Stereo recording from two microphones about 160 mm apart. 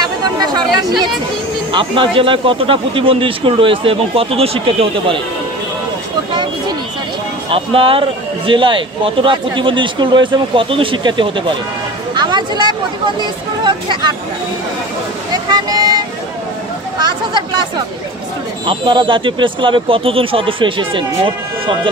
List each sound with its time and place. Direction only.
1.7 s speech: 30° right (ahead or behind)
7.4 s speech: 35° right (ahead or behind)
12.2 s a sound: 30° right (ahead or behind)
13.2 s speech: 30° right (ahead or behind)
15.5 s speech: 25° right (ahead or behind)
17.0 s speech: 30° right (ahead or behind)
18.7 s speech: 30° right (ahead or behind)